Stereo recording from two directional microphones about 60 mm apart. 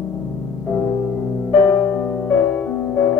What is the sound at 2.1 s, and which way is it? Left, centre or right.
Music, centre.